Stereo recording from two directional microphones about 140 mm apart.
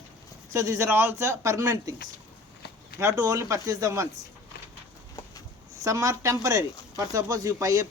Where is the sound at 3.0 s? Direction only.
20° right (ahead or behind).